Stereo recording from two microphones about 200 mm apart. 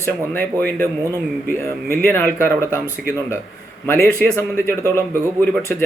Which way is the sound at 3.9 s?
10° left (ahead or behind).